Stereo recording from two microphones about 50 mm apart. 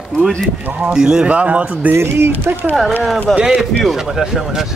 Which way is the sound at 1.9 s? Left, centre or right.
Right.